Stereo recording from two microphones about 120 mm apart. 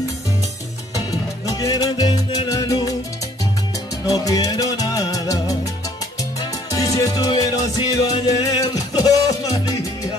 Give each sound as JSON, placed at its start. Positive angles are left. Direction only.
{"t": 1.5, "sound": "salsa music", "side_deg": 30}
{"t": 4.0, "sound": "music", "side_deg": 30}
{"t": 6.4, "sound": "music", "side_deg": 30}